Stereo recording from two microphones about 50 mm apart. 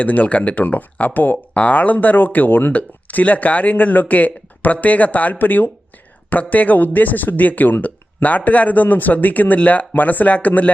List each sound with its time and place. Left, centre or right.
0.0 s speech: left
2.7 s speech: left